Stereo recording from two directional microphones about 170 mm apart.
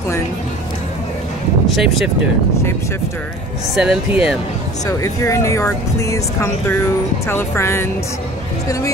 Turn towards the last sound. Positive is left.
turn(degrees=15)  # may be behind; listen again after turning